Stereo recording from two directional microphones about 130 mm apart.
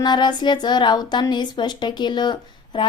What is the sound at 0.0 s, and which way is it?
A woman's voice, 35° left (ahead or behind).